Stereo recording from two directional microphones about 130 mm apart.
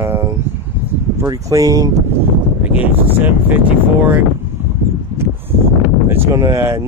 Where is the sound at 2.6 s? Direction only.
10° right (ahead or behind).